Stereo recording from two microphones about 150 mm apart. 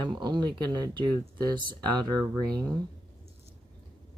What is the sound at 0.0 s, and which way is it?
Speech, 30° right (ahead or behind).